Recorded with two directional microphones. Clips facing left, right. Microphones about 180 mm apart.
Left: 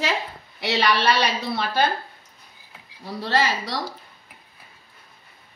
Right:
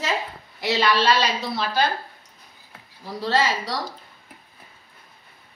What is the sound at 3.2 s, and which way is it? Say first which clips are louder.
Speech: right 1 dB; 65° left (ahead or behind).